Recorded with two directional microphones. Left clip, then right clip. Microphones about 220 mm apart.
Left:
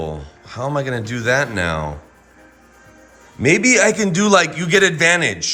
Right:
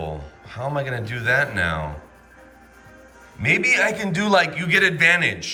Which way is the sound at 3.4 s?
15° left (ahead or behind).